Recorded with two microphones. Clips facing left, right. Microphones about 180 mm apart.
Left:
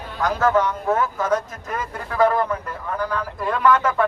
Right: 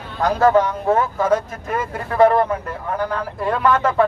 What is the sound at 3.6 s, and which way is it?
Speech, 30° right (ahead or behind).